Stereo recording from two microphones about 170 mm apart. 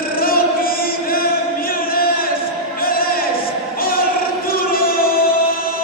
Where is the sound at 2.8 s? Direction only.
60° left (ahead or behind).